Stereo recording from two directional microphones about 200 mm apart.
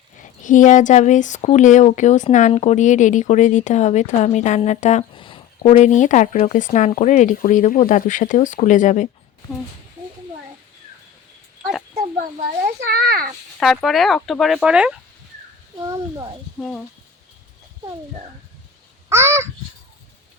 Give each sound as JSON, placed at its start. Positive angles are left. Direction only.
{"t": 0.2, "sound": "speech", "side_deg": 40}
{"t": 12.9, "sound": "a child's voice", "side_deg": -50}
{"t": 13.6, "sound": "speech", "side_deg": 0}
{"t": 15.8, "sound": "speech", "side_deg": -15}
{"t": 16.6, "sound": "speech", "side_deg": 5}
{"t": 19.0, "sound": "a sound", "side_deg": -15}